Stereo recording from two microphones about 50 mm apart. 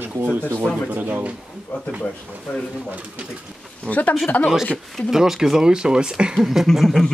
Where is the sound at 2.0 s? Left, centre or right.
Left.